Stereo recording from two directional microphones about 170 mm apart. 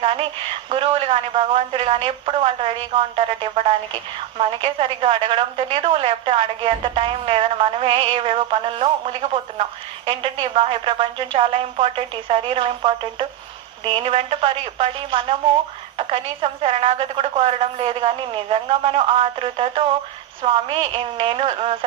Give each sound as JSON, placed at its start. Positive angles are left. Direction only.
{"t": 0.0, "sound": "a woman's voice", "side_deg": -30}